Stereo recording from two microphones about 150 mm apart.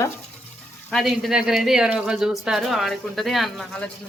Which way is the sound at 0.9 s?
Centre (ahead or behind).